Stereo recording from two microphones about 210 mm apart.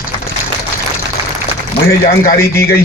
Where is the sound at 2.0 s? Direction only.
45° left (ahead or behind).